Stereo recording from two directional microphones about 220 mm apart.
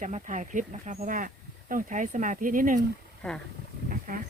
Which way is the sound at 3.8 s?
40° right (ahead or behind).